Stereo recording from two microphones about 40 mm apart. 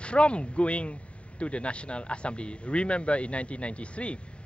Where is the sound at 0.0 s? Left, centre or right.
Left.